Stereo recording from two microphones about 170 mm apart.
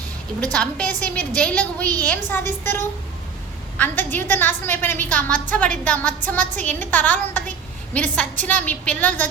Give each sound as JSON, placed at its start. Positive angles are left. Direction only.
{"t": 0.5, "sound": "a woman's voice", "side_deg": 5}